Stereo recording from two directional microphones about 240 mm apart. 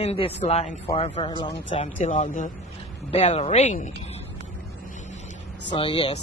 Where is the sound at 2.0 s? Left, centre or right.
Left.